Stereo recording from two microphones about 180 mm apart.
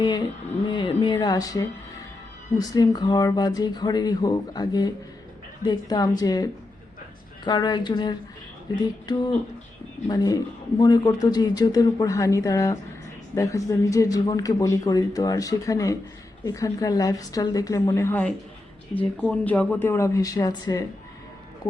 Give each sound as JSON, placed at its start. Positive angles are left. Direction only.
{"t": 0.7, "sound": "speech", "side_deg": 25}